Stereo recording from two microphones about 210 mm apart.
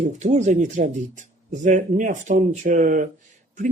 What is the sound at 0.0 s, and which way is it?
Speech, 35° right (ahead or behind).